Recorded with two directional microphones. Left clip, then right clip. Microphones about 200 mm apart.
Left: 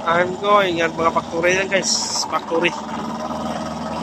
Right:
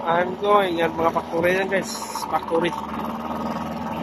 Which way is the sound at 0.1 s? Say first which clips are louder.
Left 3 dB; 10° right (ahead or behind).